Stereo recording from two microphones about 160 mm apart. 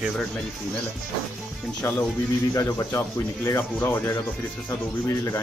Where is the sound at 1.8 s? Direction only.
15° left (ahead or behind).